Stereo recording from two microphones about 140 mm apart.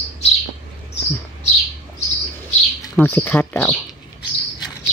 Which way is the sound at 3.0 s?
15° left (ahead or behind).